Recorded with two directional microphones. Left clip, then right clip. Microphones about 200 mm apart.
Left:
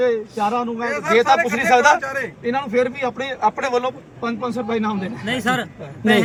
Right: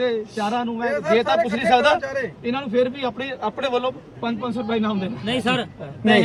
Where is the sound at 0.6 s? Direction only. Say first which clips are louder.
Left 1 dB; 20° left (ahead or behind).